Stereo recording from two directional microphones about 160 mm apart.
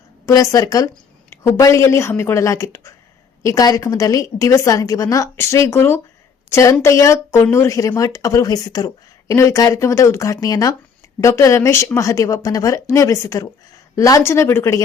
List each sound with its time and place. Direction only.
0.3 s a woman's voice: 20° left (ahead or behind)